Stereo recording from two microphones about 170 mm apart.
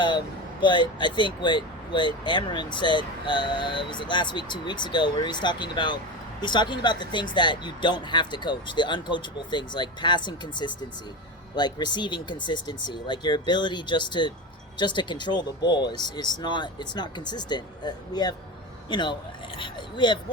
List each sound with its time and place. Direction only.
0.6 s speech: 30° left (ahead or behind)